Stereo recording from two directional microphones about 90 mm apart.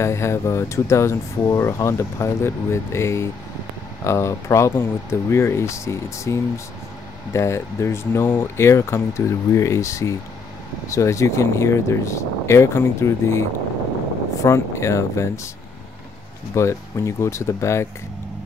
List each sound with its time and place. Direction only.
0.0 s speech: 30° left (ahead or behind)
16.5 s speech: 35° left (ahead or behind)